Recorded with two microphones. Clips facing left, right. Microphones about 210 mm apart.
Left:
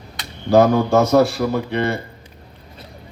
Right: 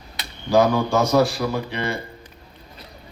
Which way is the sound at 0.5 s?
60° left (ahead or behind).